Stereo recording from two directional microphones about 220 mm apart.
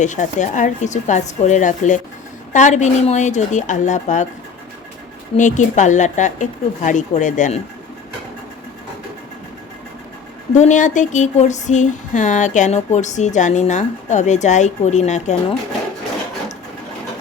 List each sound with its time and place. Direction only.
0.0 s speech: 35° left (ahead or behind)
5.4 s speech: 35° left (ahead or behind)
10.5 s speech: 35° left (ahead or behind)